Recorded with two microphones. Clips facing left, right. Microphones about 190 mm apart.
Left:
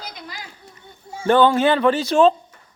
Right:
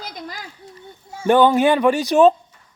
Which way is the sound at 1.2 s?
15° right (ahead or behind).